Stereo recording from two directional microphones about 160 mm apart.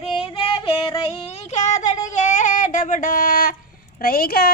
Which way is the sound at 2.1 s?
50° left (ahead or behind).